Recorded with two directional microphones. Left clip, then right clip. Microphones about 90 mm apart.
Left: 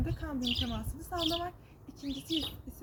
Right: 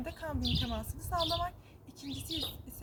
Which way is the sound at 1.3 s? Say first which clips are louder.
Right 1 dB; 45° right (ahead or behind).